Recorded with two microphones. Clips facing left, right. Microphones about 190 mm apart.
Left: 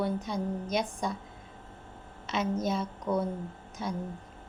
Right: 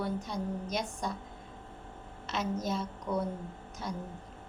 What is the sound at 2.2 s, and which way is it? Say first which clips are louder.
A woman's voice: left 4 dB; centre (ahead or behind).